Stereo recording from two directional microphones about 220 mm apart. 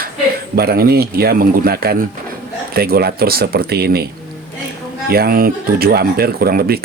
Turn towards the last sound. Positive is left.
turn(degrees=-45)  # may be behind; listen again after turning